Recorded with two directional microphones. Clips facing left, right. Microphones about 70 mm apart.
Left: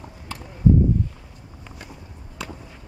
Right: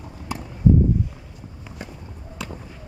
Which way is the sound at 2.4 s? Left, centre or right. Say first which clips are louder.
Right 1 dB; centre.